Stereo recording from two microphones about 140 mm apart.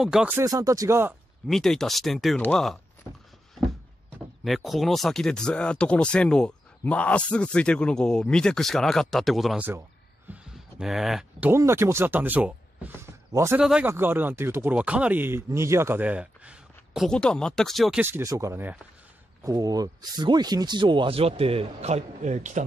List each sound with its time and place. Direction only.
0.0 s speech: 5° right (ahead or behind)
0.4 s speech: 25° right (ahead or behind)
1.5 s speech: 5° left (ahead or behind)
4.5 s speech: centre (ahead or behind)
9.6 s speech: 15° right (ahead or behind)
10.3 s speech: 5° right (ahead or behind); by 13.6 s 20° right (ahead or behind)
13.6 s speech: 5° right (ahead or behind)
18.0 s speech: 20° right (ahead or behind)
19.4 s speech: 25° right (ahead or behind); by 22.6 s 60° right (ahead or behind)